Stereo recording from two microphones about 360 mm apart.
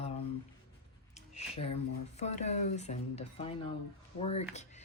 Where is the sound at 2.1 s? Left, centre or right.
Centre.